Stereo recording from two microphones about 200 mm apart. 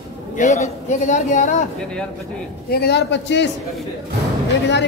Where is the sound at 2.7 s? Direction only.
55° left (ahead or behind).